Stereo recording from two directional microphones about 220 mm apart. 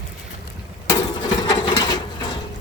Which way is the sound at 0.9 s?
20° left (ahead or behind).